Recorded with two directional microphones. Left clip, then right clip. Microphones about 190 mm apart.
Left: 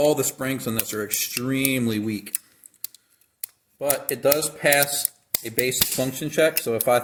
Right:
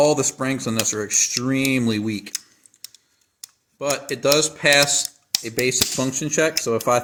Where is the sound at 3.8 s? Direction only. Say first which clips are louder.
Right 1 dB; 55° right (ahead or behind).